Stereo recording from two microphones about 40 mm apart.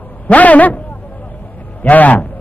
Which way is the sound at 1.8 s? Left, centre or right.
Left.